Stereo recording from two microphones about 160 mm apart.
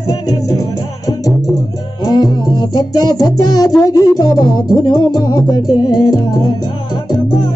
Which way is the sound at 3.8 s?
20° left (ahead or behind).